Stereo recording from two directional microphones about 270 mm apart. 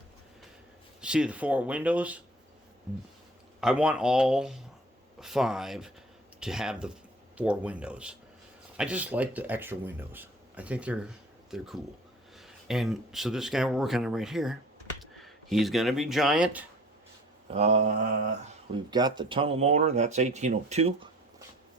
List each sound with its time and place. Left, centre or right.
1.0 s speech: centre
3.6 s speech: centre
17.5 s speech: right